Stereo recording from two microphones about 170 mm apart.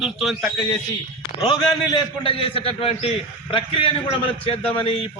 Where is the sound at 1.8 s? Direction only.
30° left (ahead or behind).